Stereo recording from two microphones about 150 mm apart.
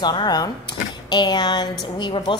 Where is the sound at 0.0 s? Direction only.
30° left (ahead or behind).